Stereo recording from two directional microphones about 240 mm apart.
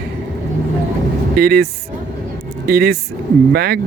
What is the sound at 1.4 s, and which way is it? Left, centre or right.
Speech, right.